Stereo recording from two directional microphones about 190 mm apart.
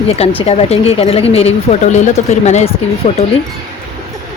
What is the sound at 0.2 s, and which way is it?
Speech, 35° left (ahead or behind).